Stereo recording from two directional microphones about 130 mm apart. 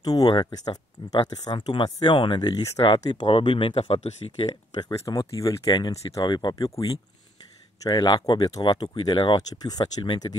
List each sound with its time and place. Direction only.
0.0 s speech: 30° left (ahead or behind); by 4.5 s 50° left (ahead or behind)
4.7 s speech: 30° left (ahead or behind)